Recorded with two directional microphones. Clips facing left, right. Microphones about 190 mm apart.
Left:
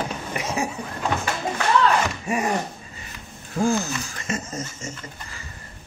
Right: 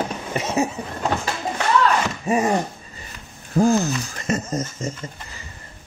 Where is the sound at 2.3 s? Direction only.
30° right (ahead or behind).